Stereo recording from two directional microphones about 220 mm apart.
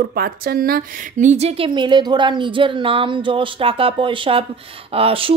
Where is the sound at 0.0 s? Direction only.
45° right (ahead or behind).